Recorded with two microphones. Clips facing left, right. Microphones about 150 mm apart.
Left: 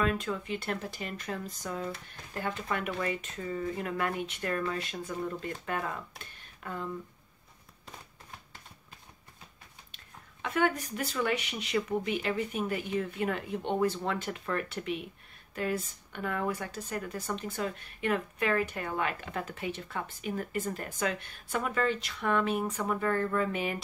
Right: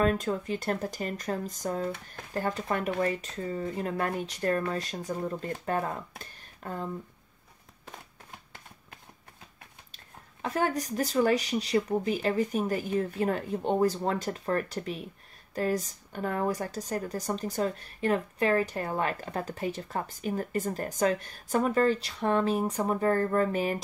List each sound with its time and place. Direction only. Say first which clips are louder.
0.0 s speech: right 4 dB; 40° right (ahead or behind)
10.4 s speech: right 1 dB; 35° right (ahead or behind)